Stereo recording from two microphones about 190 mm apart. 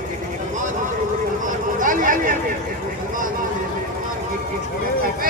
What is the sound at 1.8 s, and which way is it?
Chatter, 45° right (ahead or behind).